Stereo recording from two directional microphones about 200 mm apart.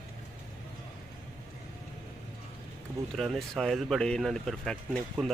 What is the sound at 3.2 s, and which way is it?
Speech, centre (ahead or behind).